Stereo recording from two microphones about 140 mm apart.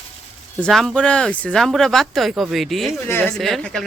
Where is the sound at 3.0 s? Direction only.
15° left (ahead or behind).